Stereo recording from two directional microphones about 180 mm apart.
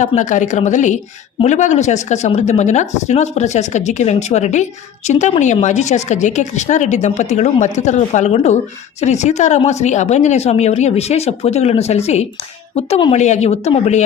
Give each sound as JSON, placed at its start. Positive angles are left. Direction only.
{"t": 0.0, "sound": "a woman's voice", "side_deg": 40}